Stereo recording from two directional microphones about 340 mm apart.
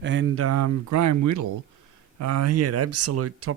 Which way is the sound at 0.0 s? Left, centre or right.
Right.